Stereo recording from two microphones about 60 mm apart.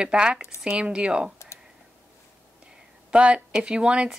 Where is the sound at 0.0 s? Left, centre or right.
Centre.